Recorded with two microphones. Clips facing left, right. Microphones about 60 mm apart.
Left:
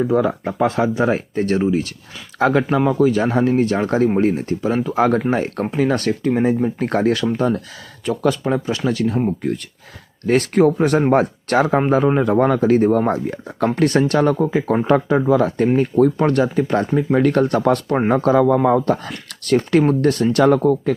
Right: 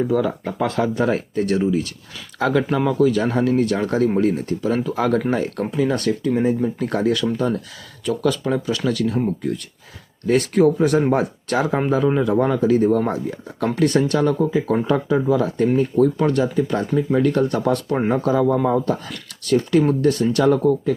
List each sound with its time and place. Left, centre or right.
0.0 s speech: left
0.4 s speech: centre
1.4 s speech: left
9.4 s speech: left
14.3 s speech: left
16.9 s speech: left
17.2 s speech: left
19.8 s speech: left
20.3 s speech: left